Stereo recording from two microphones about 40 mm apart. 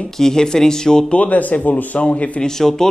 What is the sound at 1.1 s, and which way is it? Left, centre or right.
Speech, left.